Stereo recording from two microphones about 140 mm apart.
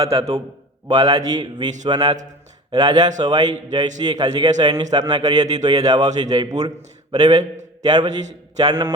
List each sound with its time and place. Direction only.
0.1 s a man's voice: 45° right (ahead or behind)
0.9 s a man's voice: 30° right (ahead or behind)